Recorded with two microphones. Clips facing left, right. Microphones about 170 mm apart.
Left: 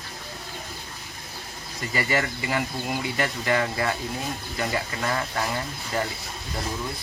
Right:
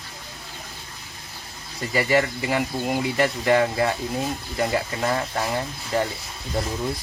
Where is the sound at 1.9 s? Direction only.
30° right (ahead or behind).